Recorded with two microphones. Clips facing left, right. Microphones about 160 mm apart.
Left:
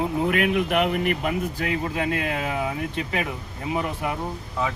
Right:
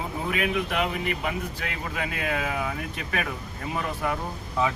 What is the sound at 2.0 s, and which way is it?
Speech, 30° left (ahead or behind).